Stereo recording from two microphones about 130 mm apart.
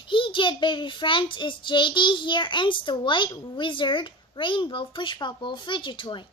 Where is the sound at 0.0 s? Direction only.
40° left (ahead or behind).